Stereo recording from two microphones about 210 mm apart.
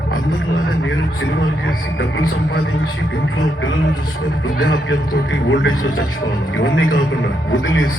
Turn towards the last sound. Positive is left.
turn(degrees=65)  # may be behind; listen again after turning